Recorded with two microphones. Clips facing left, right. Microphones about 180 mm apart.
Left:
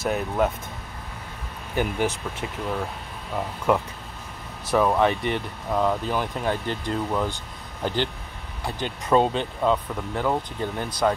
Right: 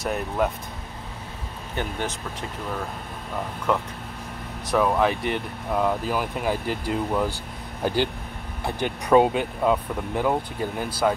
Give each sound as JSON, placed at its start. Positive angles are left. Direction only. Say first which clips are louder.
{"t": 0.0, "sound": "speech", "louder": "left 1 dB", "side_deg": 0}
{"t": 3.7, "sound": "speech", "louder": "left 3 dB", "side_deg": 10}